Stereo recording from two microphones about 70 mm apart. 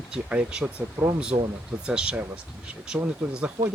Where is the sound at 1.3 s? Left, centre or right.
Right.